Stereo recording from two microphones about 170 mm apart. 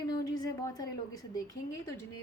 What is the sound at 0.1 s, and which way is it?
A woman's voice, 20° left (ahead or behind).